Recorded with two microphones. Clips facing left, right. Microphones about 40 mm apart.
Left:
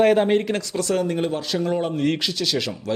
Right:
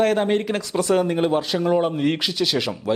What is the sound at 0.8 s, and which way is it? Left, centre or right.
Speech, centre.